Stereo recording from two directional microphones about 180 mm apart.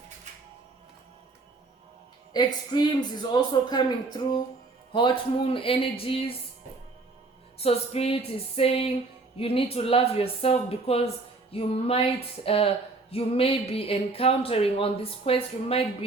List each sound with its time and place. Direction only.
2.3 s speech: 25° left (ahead or behind)
7.6 s speech: 35° left (ahead or behind)